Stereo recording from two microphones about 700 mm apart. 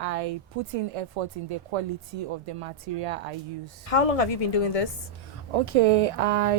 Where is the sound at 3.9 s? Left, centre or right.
Left.